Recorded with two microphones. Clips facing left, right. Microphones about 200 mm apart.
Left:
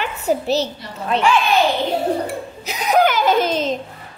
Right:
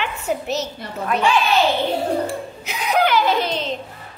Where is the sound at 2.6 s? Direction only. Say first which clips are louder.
Left 4 dB; 40° left (ahead or behind).